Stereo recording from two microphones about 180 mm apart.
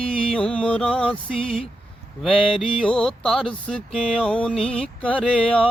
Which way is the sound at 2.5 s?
30° left (ahead or behind).